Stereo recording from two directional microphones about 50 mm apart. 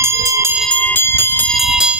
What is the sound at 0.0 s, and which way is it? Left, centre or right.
Bell, right.